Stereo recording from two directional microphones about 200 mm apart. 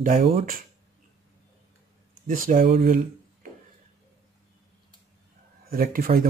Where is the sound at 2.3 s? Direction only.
45° right (ahead or behind).